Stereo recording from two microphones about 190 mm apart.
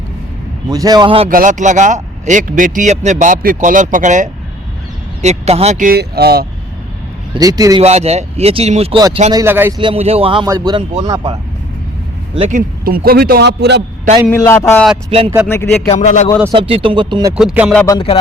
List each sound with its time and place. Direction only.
0.7 s speech: 20° right (ahead or behind)
1.3 s a man's voice: 45° right (ahead or behind)
7.3 s speech: 20° right (ahead or behind)
7.8 s speech: 35° right (ahead or behind)
9.3 s speech: 15° right (ahead or behind)
9.8 s speech: 30° right (ahead or behind)
12.3 s a man's voice: 35° right (ahead or behind); by 13.8 s 60° right (ahead or behind)
14.3 s a man's voice: 15° left (ahead or behind)
16.0 s speech: 40° left (ahead or behind)
16.5 s speech: 25° right (ahead or behind)
17.3 s music: 5° right (ahead or behind)
17.8 s music: 25° left (ahead or behind)